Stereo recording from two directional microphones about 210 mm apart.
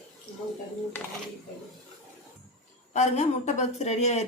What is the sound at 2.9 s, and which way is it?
Speech, 35° left (ahead or behind).